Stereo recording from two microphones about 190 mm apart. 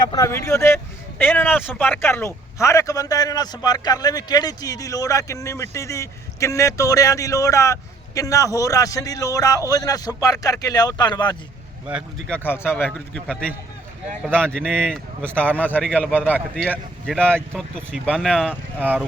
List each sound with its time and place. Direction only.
0.1 s speech: 15° left (ahead or behind)
12.3 s speech: 10° left (ahead or behind); by 19.0 s 5° right (ahead or behind)